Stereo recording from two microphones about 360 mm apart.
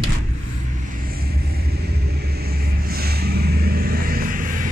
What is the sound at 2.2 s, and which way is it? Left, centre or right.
Vehicle, right.